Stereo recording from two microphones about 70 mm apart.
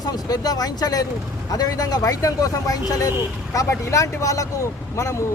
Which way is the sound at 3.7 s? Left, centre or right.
Left.